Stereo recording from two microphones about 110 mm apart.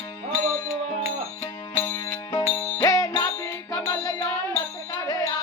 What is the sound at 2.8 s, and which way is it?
Music, 35° left (ahead or behind).